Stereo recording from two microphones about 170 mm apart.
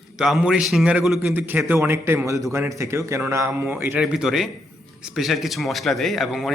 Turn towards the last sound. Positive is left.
turn(degrees=0)  # may be behind; listen again after turning